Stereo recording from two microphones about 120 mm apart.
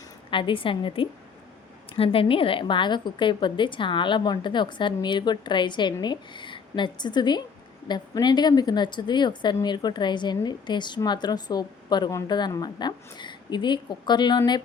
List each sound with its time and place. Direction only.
0.3 s a woman's voice: 45° left (ahead or behind)